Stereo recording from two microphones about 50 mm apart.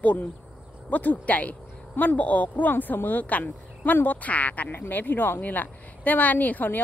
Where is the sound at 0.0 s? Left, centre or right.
Left.